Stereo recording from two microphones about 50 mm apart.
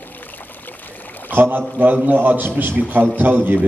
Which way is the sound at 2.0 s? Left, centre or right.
Right.